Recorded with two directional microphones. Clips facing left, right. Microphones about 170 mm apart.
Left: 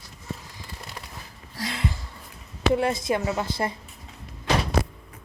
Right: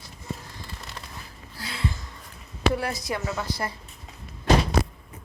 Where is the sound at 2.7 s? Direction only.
25° left (ahead or behind).